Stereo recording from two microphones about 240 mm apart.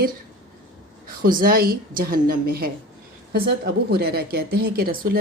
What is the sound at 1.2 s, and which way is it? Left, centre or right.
A woman's voice, right.